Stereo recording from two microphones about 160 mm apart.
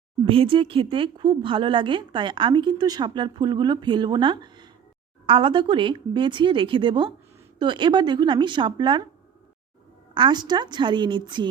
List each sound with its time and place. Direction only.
0.3 s a woman's voice: 35° right (ahead or behind)
10.2 s a woman's voice: 25° right (ahead or behind)